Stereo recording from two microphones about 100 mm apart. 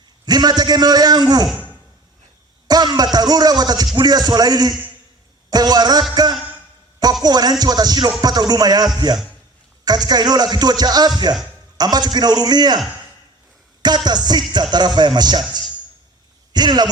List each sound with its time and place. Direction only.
0.3 s a man's voice: 45° right (ahead or behind)
2.6 s music: 45° right (ahead or behind)
3.9 s a man's voice: 45° right (ahead or behind)
7.0 s a sound: 45° right (ahead or behind)
7.6 s a man's voice: 40° right (ahead or behind)
13.8 s a man's voice: 45° right (ahead or behind)
16.5 s speech: 45° right (ahead or behind)